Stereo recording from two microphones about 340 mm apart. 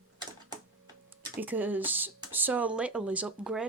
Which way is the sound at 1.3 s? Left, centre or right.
Centre.